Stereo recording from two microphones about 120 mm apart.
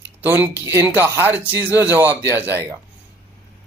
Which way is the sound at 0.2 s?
15° right (ahead or behind).